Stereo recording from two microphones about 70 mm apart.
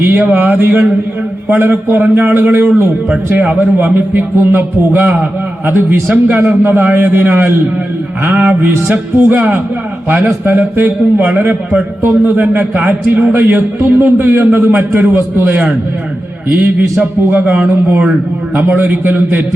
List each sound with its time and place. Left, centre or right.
0.0 s a man's voice: right
17.0 s a man's voice: right